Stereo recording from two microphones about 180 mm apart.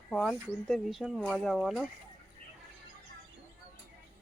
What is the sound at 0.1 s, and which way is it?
Speech, 5° left (ahead or behind).